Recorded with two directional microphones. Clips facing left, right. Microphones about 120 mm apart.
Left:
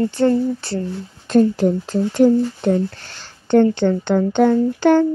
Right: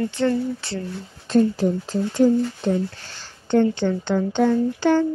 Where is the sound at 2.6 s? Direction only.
60° left (ahead or behind).